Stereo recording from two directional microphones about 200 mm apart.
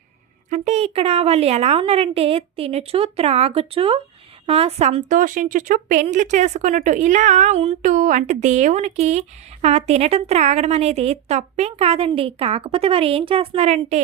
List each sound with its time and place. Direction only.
0.5 s a woman's voice: 35° right (ahead or behind)